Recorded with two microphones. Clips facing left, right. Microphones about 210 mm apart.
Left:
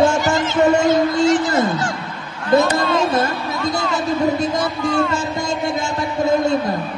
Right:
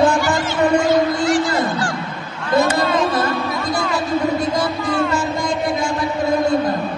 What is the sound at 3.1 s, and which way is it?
Music, 25° left (ahead or behind).